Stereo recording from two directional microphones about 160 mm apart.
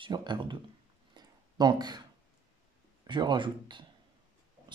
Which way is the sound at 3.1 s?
30° right (ahead or behind).